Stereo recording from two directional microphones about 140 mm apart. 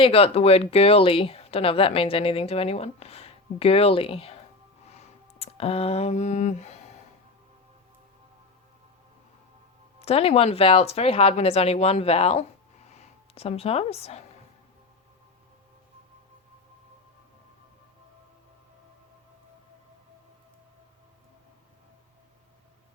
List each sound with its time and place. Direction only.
0.0 s speech: 45° left (ahead or behind)
4.9 s a sound: 45° left (ahead or behind)
10.0 s speech: 45° left (ahead or behind)